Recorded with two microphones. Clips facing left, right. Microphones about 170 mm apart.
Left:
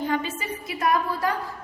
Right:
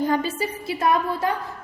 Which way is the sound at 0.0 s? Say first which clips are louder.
Right 4 dB; 40° right (ahead or behind).